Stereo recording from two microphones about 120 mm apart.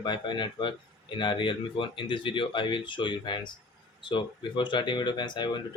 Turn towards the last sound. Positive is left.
turn(degrees=40)  # may be behind; listen again after turning